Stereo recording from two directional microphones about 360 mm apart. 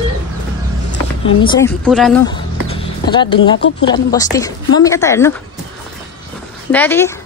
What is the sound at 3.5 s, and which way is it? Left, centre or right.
Speech, left.